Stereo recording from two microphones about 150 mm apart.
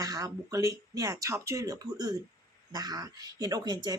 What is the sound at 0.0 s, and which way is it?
Speech, 25° right (ahead or behind).